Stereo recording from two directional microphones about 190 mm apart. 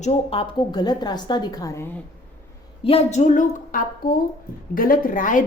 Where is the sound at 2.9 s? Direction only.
35° left (ahead or behind).